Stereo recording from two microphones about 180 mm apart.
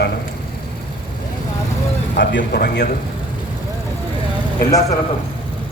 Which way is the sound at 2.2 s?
60° left (ahead or behind).